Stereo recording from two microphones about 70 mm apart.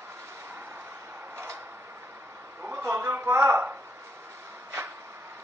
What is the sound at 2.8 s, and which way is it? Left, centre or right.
Speech, right.